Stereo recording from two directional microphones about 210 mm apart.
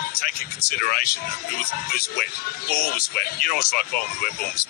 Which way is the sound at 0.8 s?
45° left (ahead or behind).